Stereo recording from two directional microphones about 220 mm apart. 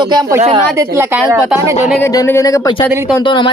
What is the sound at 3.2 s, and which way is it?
Speech, 20° left (ahead or behind).